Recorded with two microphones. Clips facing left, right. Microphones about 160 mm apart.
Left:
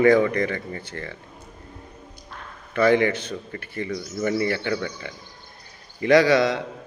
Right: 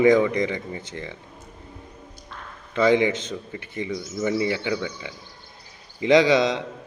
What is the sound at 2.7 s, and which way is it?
A man's voice, 20° right (ahead or behind).